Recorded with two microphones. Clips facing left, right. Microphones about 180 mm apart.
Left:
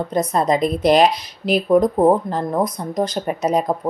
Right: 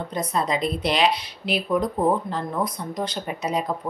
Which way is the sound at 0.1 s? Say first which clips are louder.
Left 6 dB; 45° left (ahead or behind).